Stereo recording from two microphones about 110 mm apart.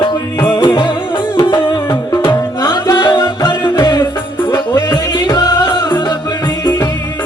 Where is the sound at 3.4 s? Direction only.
40° left (ahead or behind).